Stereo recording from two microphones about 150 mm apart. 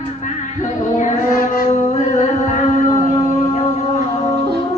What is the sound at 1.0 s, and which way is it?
Child singing, 70° left (ahead or behind).